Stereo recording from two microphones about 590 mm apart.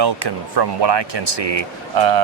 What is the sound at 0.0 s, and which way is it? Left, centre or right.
Speech, right.